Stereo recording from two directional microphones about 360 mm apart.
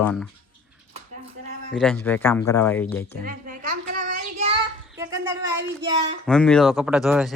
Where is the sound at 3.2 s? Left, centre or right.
Right.